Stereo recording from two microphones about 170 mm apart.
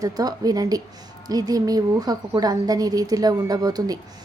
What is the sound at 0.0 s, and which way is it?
A woman's voice, 20° right (ahead or behind).